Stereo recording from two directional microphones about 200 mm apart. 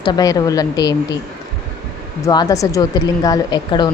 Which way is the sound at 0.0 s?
20° left (ahead or behind).